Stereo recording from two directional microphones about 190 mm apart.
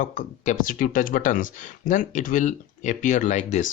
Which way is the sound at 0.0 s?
40° left (ahead or behind).